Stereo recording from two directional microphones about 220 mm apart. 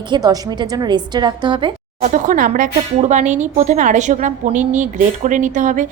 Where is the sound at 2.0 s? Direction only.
35° right (ahead or behind).